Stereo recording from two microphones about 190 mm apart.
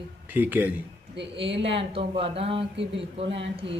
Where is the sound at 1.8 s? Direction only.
30° right (ahead or behind).